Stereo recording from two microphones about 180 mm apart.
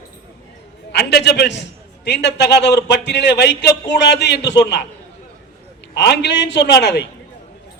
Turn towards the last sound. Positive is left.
turn(degrees=70)  # may be behind; listen again after turning